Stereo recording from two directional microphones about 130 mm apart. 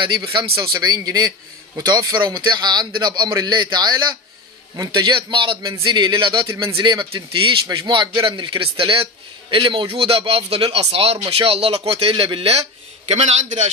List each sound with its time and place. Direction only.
0.0 s a man's voice: 40° right (ahead or behind)
6.4 s a man's voice: 25° right (ahead or behind)
6.7 s a man's voice: 35° right (ahead or behind); by 13.7 s 60° right (ahead or behind)